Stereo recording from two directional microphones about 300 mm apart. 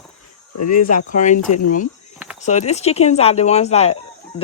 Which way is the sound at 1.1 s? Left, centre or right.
Left.